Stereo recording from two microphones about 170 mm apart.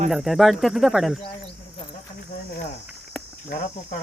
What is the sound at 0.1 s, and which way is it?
Speech, centre (ahead or behind).